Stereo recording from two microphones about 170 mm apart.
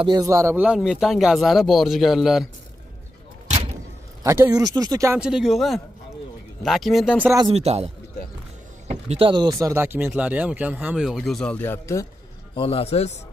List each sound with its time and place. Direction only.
0.0 s speech: 25° right (ahead or behind); by 2.4 s centre (ahead or behind)
4.2 s speech: 20° right (ahead or behind)
5.2 s speech: 5° right (ahead or behind)
7.5 s a man's voice: 35° right (ahead or behind); by 12.1 s 15° left (ahead or behind)
12.5 s a man's voice: 35° left (ahead or behind)